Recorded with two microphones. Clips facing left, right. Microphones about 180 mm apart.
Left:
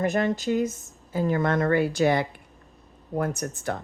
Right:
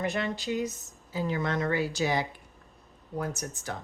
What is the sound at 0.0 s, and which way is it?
Speech, 45° left (ahead or behind).